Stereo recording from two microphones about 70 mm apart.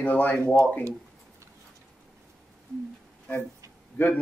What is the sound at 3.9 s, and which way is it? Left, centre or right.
Speech, left.